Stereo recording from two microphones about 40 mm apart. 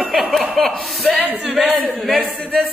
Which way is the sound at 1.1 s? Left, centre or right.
Right.